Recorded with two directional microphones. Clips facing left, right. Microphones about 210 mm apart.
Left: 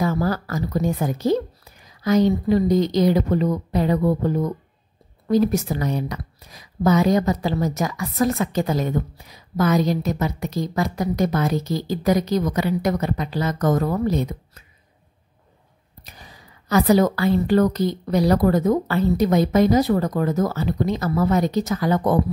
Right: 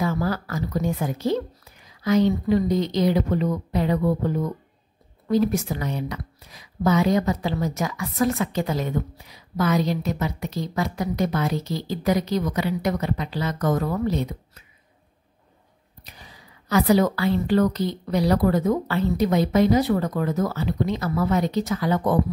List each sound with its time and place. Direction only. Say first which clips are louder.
0.0 s a woman's voice: left 3 dB; 40° left (ahead or behind)
16.0 s a woman's voice: left 2 dB; 45° left (ahead or behind)